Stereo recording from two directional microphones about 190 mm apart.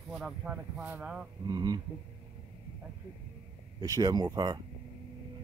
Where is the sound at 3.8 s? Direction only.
20° right (ahead or behind).